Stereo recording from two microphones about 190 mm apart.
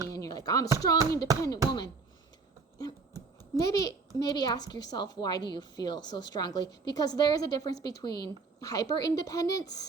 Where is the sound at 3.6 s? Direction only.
15° left (ahead or behind).